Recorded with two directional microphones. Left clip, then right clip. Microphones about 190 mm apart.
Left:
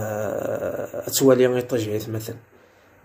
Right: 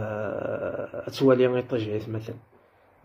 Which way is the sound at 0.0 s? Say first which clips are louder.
Left 4 dB; 5° left (ahead or behind).